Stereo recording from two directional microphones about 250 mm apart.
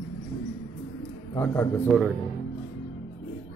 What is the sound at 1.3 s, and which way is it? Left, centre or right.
Speech, centre.